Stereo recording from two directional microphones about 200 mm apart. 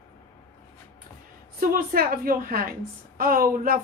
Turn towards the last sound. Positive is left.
turn(degrees=-45)  # may be behind; listen again after turning